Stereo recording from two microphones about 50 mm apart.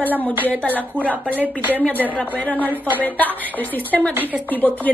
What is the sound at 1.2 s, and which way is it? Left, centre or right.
Speech, right.